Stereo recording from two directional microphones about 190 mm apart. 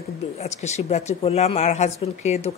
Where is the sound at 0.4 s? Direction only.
35° left (ahead or behind).